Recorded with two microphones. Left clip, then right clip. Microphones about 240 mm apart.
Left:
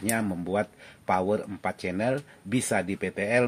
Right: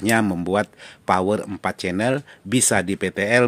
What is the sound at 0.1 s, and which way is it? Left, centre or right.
Speech, right.